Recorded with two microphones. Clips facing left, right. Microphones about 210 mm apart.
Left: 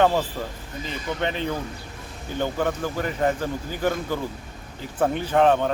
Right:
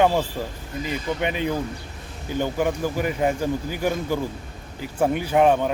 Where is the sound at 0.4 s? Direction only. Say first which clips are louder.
Right 2 dB; 15° right (ahead or behind).